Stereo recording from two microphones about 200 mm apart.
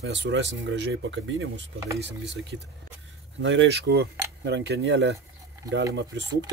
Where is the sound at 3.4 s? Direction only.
60° right (ahead or behind).